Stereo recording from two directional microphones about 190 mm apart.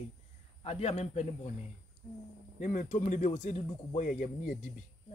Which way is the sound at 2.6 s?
40° left (ahead or behind).